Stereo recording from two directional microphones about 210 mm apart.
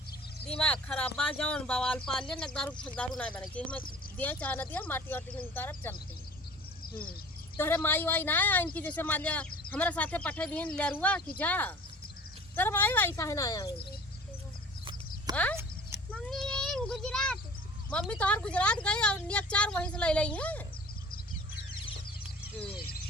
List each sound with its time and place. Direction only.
0.4 s speech: 5° left (ahead or behind)
6.8 s speech: 45° left (ahead or behind)
7.5 s speech: 10° left (ahead or behind)
15.3 s speech: 20° right (ahead or behind)
16.1 s a sound: 5° left (ahead or behind)
17.9 s speech: 5° left (ahead or behind)